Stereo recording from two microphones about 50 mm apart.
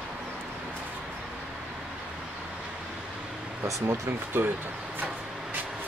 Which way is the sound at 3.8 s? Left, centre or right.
Right.